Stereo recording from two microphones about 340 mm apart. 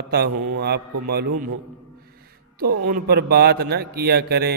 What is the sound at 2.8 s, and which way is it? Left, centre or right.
A man's voice, right.